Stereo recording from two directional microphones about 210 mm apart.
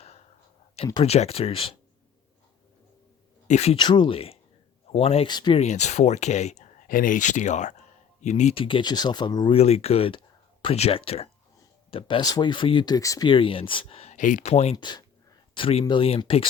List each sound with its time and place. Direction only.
1.0 s speech: 30° left (ahead or behind)
3.4 s speech: 30° left (ahead or behind)